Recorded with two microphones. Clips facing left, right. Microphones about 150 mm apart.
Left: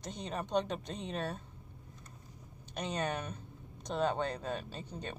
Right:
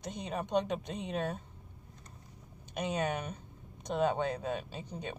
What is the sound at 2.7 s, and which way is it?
Speech, 10° right (ahead or behind).